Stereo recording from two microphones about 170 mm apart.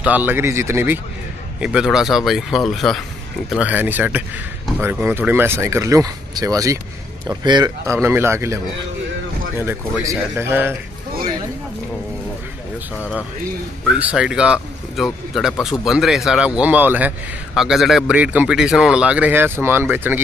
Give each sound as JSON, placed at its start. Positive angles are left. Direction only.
{"t": 0.0, "sound": "a man's voice", "side_deg": -10}
{"t": 10.0, "sound": "a man's voice", "side_deg": -15}
{"t": 13.9, "sound": "a man's voice", "side_deg": -5}